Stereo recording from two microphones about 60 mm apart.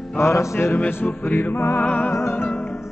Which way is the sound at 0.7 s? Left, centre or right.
Left.